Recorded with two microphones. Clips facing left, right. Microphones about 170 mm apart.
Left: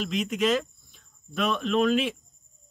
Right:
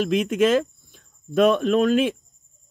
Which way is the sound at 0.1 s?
50° right (ahead or behind).